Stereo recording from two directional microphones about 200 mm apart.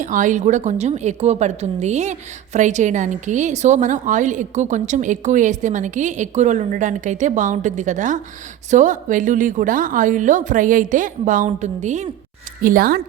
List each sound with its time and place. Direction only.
0.0 s a woman's voice: 40° right (ahead or behind)
12.6 s speech: 45° right (ahead or behind)